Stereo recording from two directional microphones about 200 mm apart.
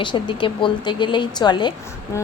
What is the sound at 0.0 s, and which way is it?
A woman's voice, 25° left (ahead or behind).